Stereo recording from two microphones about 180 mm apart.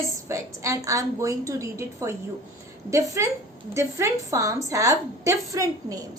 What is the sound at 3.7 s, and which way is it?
A woman's voice, 15° right (ahead or behind).